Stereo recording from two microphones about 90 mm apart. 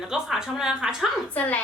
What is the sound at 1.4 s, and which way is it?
Speech, 20° left (ahead or behind).